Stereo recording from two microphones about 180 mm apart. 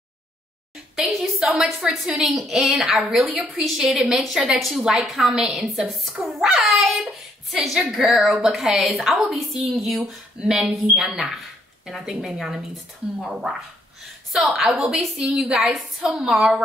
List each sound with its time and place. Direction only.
0.9 s a woman's voice: centre (ahead or behind)